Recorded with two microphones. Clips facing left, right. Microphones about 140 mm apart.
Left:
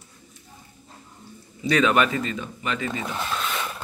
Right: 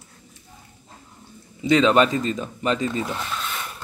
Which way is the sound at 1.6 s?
25° right (ahead or behind).